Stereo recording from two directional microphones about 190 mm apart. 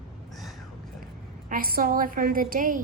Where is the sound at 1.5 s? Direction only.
50° right (ahead or behind).